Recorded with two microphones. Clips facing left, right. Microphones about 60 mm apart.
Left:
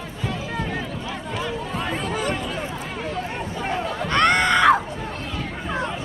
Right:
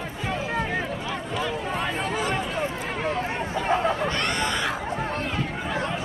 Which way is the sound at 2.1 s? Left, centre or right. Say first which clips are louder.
Left 1 dB; centre.